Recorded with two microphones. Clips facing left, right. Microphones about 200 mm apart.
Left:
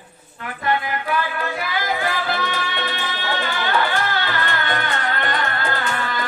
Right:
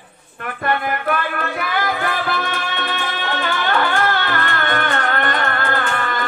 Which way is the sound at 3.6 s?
55° right (ahead or behind).